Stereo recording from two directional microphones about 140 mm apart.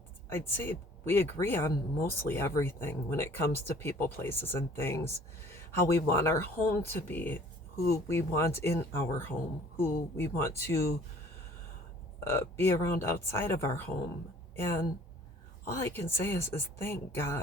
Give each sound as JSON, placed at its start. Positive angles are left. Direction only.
{"t": 0.3, "sound": "speech", "side_deg": 15}
{"t": 12.2, "sound": "speech", "side_deg": 20}